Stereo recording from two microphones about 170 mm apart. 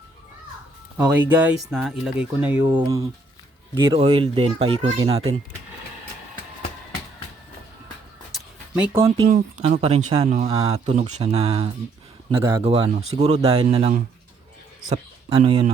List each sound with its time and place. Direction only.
0.9 s speech: 10° right (ahead or behind)
2.6 s speech: 20° right (ahead or behind)
8.3 s a sound: 5° right (ahead or behind)
9.0 s speech: 35° right (ahead or behind)
15.4 s speech: 35° right (ahead or behind)